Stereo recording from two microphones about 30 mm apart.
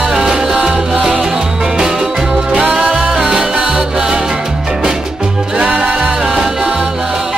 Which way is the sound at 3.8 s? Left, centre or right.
Centre.